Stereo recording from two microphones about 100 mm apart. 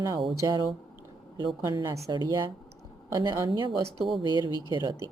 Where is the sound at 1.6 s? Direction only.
40° right (ahead or behind).